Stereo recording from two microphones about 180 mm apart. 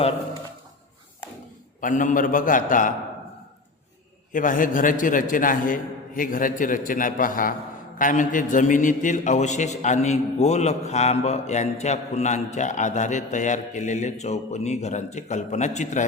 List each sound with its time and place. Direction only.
1.8 s a man's voice: 45° left (ahead or behind)
4.3 s a man's voice: 45° left (ahead or behind)